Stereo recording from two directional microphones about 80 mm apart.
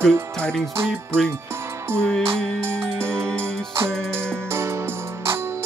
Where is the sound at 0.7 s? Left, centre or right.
Right.